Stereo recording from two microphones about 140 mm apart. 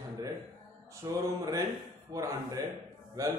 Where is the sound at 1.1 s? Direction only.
25° right (ahead or behind).